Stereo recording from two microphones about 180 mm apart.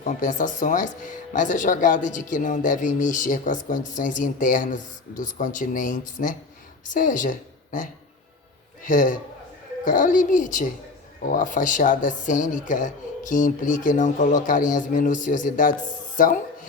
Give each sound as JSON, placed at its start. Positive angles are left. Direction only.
{"t": 0.0, "sound": "speech", "side_deg": 45}
{"t": 8.9, "sound": "speech", "side_deg": 45}